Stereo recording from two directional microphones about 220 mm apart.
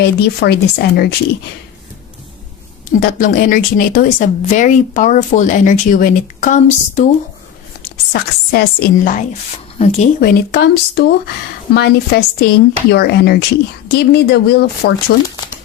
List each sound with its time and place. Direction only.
0.0 s speech: 50° left (ahead or behind)
3.0 s a woman's voice: 40° left (ahead or behind)
7.8 s a woman's voice: 45° left (ahead or behind)
9.7 s speech: 30° left (ahead or behind)
10.2 s speech: 45° left (ahead or behind)